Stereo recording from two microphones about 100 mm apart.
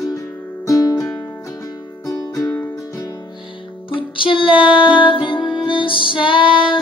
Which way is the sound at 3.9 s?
60° left (ahead or behind).